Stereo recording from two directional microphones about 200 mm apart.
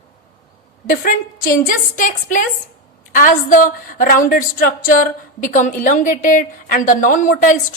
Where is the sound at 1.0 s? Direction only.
45° left (ahead or behind).